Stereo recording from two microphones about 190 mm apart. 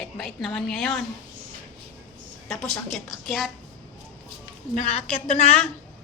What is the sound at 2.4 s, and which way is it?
A woman's voice, centre (ahead or behind).